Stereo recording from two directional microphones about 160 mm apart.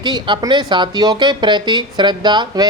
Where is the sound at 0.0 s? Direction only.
30° right (ahead or behind).